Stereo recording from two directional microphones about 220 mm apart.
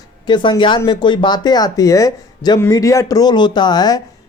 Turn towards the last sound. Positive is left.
turn(degrees=15)  # may be behind; listen again after turning